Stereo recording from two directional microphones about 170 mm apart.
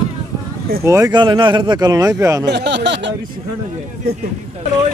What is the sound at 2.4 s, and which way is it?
Speech, 85° right.